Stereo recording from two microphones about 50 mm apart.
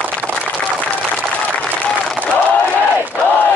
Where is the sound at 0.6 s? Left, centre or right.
Left.